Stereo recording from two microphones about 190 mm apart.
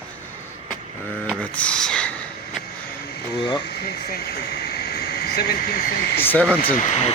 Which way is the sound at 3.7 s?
60° left (ahead or behind).